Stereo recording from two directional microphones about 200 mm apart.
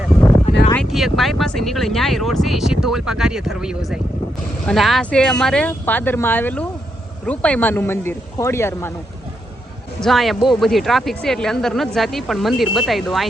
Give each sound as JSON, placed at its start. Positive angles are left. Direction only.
{"t": 0.7, "sound": "speech", "side_deg": 0}
{"t": 10.0, "sound": "speech", "side_deg": 0}